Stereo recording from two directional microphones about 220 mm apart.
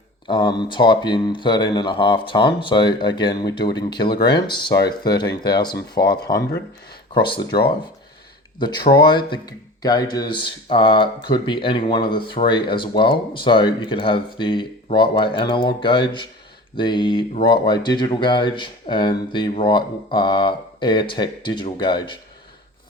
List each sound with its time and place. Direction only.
0.3 s speech: 20° left (ahead or behind)
8.5 s speech: 20° left (ahead or behind)